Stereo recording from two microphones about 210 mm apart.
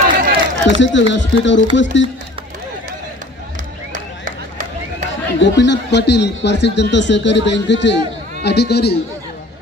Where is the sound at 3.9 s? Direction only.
35° right (ahead or behind).